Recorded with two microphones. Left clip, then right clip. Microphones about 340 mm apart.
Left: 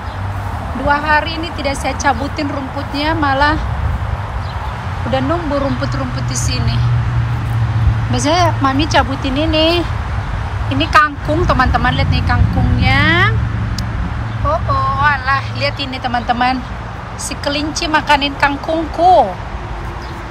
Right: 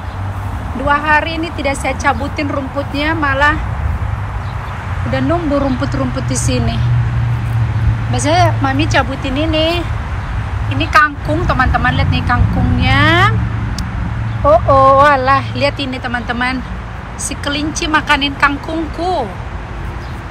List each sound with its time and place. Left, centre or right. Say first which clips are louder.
0.8 s speech: right 1 dB; centre
5.1 s speech: right 1 dB; centre
8.1 s speech: right 1 dB; centre
15.0 s speech: right 4 dB; centre